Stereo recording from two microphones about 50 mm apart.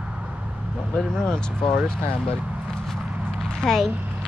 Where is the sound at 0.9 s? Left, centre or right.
Centre.